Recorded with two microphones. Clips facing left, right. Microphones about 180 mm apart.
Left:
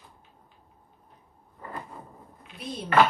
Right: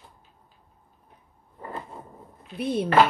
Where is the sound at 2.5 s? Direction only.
60° right (ahead or behind).